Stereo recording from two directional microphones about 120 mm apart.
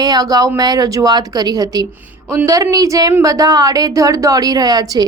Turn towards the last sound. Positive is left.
turn(degrees=-35)  # may be behind; listen again after turning